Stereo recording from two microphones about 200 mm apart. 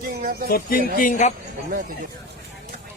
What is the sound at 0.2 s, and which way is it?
Speech, 50° right (ahead or behind).